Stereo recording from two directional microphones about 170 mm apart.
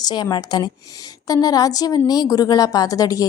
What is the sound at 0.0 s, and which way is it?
A woman's voice, 25° left (ahead or behind).